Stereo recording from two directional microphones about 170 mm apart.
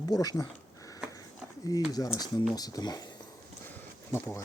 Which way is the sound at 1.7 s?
20° left (ahead or behind).